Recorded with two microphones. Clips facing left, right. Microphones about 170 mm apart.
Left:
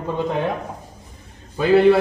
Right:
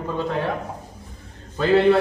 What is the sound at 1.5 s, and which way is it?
Speech, 10° left (ahead or behind).